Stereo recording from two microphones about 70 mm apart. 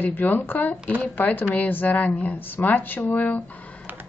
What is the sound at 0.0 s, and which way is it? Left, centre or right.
Speech, left.